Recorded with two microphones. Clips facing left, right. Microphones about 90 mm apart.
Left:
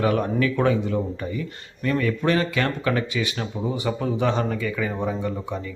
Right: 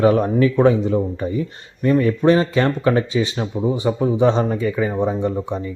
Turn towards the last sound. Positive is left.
turn(degrees=-25)  # may be behind; listen again after turning